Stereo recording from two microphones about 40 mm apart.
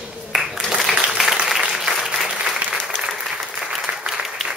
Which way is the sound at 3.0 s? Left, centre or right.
Right.